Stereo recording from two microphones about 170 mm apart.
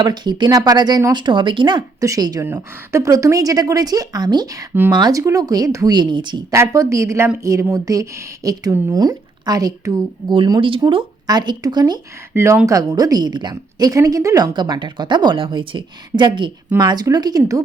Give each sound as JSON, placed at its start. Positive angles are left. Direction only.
{"t": 0.0, "sound": "a woman's voice", "side_deg": -25}
{"t": 12.3, "sound": "speech", "side_deg": -15}